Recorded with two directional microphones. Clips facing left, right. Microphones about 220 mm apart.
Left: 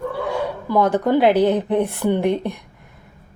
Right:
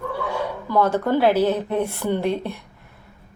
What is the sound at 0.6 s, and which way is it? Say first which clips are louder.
A woman's voice: left 2 dB; 15° left (ahead or behind).